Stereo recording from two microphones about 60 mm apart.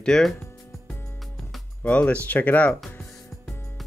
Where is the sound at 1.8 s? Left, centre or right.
Left.